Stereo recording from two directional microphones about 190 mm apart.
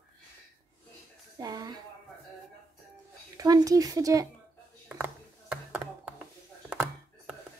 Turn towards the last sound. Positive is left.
turn(degrees=-5)  # may be behind; listen again after turning